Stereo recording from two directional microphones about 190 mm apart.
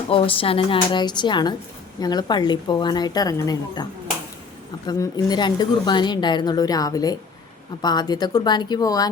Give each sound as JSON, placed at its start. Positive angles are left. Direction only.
{"t": 0.1, "sound": "speech", "side_deg": 30}
{"t": 4.9, "sound": "speech", "side_deg": 20}